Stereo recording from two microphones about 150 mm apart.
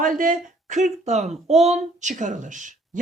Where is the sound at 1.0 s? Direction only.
50° right (ahead or behind).